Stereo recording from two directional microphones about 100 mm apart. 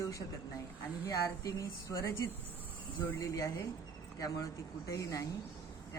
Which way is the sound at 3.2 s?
35° left (ahead or behind).